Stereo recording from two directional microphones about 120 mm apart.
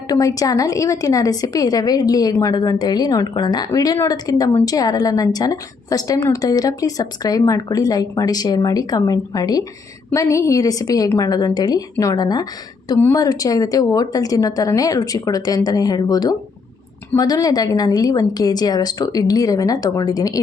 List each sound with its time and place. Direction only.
0.1 s a woman's voice: 30° left (ahead or behind)